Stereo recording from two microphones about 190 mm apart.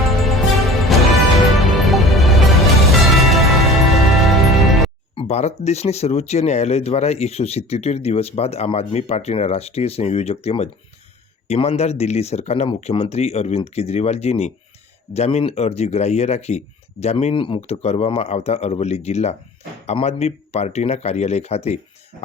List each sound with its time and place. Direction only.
0.3 s music: centre (ahead or behind)
5.1 s speech: 35° left (ahead or behind)